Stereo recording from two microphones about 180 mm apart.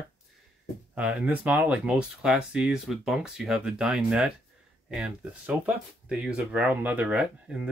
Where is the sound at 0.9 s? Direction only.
5° right (ahead or behind).